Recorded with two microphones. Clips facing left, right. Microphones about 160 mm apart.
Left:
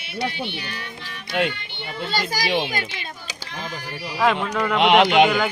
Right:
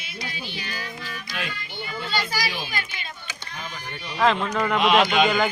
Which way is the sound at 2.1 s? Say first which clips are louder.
Left 2 dB; 40° left (ahead or behind).